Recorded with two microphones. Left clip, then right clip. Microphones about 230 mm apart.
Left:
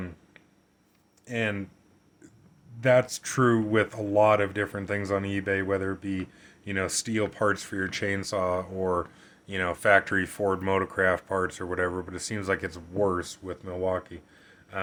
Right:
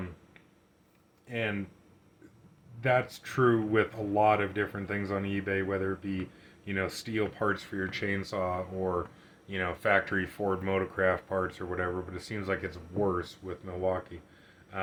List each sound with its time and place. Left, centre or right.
1.3 s speech: left
2.8 s speech: left